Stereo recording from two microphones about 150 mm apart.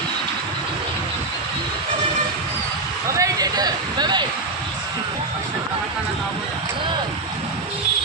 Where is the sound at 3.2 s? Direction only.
25° right (ahead or behind).